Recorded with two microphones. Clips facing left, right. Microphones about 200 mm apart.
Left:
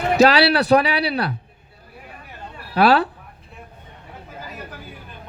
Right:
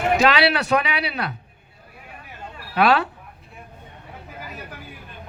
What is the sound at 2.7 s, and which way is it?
Speech, 35° left (ahead or behind).